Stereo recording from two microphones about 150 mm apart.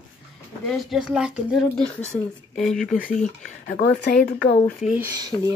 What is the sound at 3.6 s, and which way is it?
Speech, 85° left.